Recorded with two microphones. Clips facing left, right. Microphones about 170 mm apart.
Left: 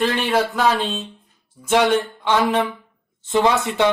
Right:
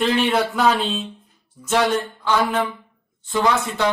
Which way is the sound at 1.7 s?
20° left (ahead or behind).